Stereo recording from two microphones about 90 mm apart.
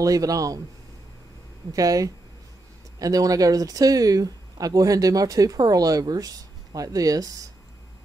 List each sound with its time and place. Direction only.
0.0 s speech: 40° right (ahead or behind)
1.7 s speech: 40° right (ahead or behind)